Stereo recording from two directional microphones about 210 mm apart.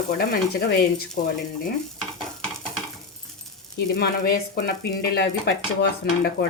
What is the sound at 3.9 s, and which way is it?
Speech, 45° left (ahead or behind).